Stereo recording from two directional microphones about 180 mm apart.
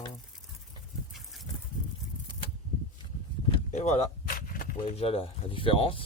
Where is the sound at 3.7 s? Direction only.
40° left (ahead or behind).